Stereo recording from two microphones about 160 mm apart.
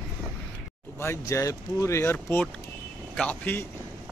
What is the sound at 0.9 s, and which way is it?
Speech, 15° left (ahead or behind).